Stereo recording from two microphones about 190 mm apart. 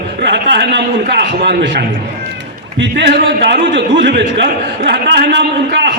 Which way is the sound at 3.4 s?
60° right (ahead or behind).